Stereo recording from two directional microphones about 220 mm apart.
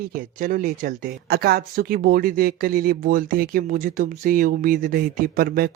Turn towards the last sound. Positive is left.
turn(degrees=-45)  # may be behind; listen again after turning